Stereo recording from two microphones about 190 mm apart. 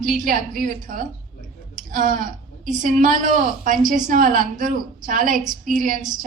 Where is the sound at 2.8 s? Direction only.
45° right (ahead or behind).